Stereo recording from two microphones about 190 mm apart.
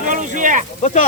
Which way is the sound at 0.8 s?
40° left (ahead or behind).